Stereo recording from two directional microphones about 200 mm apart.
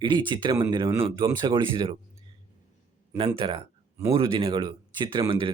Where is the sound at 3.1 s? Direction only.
25° right (ahead or behind).